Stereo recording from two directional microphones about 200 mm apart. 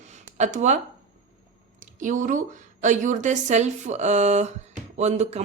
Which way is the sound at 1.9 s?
40° right (ahead or behind).